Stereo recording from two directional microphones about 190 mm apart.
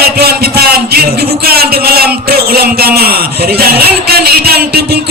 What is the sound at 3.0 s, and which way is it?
Speech, 55° right (ahead or behind).